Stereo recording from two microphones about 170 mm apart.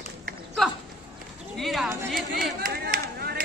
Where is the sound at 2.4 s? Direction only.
70° right (ahead or behind).